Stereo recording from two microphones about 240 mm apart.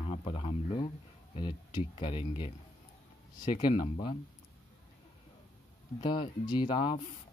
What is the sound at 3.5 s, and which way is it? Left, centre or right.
Speech, left.